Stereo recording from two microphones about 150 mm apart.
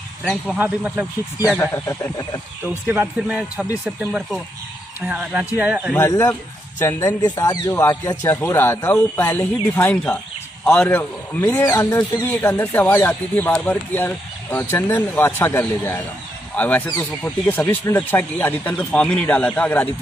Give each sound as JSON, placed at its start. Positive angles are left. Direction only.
{"t": 0.2, "sound": "speech", "side_deg": 0}
{"t": 0.6, "sound": "a man's voice", "side_deg": -10}
{"t": 1.5, "sound": "speech", "side_deg": 15}
{"t": 2.9, "sound": "a man's voice", "side_deg": -10}
{"t": 5.9, "sound": "speech", "side_deg": 20}